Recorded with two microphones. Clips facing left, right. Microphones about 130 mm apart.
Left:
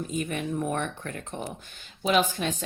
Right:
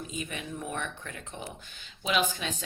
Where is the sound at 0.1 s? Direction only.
50° left (ahead or behind).